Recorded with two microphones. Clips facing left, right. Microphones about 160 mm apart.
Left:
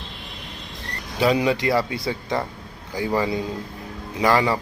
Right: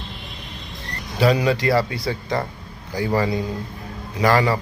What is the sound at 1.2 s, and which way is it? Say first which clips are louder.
A man's voice: right 1 dB; 20° left (ahead or behind).